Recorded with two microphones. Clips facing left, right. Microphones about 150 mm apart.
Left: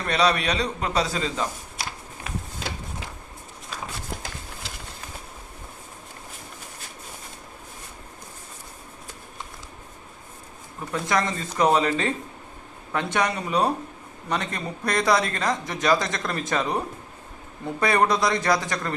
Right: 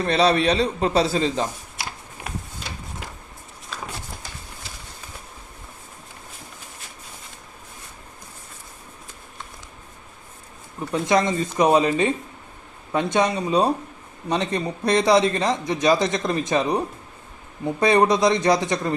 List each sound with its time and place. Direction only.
0.0 s a man's voice: 30° right (ahead or behind)
10.9 s speech: 20° right (ahead or behind)